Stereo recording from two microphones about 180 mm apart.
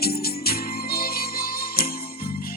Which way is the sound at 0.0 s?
55° left (ahead or behind).